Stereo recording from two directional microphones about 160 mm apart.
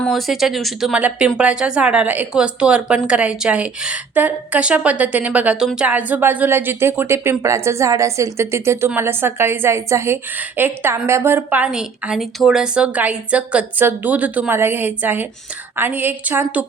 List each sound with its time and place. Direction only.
0.0 s a woman's voice: centre (ahead or behind)